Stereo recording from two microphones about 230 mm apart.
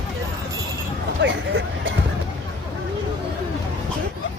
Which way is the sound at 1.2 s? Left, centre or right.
Right.